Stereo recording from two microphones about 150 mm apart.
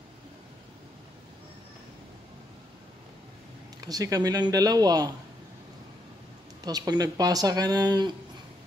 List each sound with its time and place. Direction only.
3.8 s speech: 25° right (ahead or behind)
6.6 s speech: 25° right (ahead or behind)